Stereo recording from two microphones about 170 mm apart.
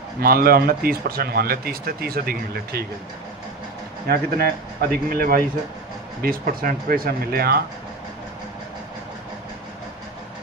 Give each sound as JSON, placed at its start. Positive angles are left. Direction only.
{"t": 0.2, "sound": "speech", "side_deg": -60}
{"t": 4.1, "sound": "speech", "side_deg": -65}